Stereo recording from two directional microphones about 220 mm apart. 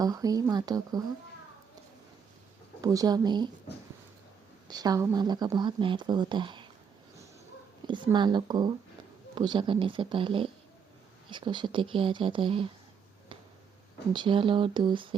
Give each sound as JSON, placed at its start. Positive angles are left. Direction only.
{"t": 0.0, "sound": "speech", "side_deg": -15}
{"t": 2.8, "sound": "speech", "side_deg": -15}
{"t": 4.7, "sound": "speech", "side_deg": -15}
{"t": 7.9, "sound": "speech", "side_deg": -20}
{"t": 14.1, "sound": "speech", "side_deg": -20}